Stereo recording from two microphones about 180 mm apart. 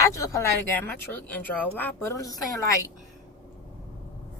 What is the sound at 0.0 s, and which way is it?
Speech, 15° left (ahead or behind).